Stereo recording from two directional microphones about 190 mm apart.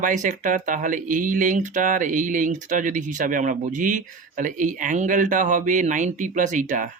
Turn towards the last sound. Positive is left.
turn(degrees=-40)  # may be behind; listen again after turning